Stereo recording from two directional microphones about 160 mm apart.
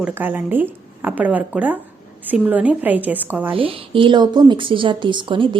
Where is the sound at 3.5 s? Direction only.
35° right (ahead or behind).